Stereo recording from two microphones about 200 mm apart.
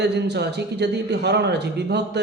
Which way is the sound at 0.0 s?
55° right (ahead or behind).